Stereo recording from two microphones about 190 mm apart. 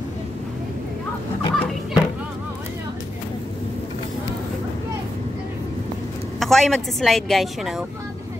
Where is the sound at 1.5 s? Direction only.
Centre (ahead or behind).